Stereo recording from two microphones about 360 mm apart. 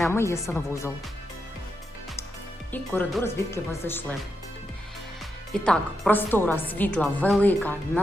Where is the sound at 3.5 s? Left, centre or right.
Centre.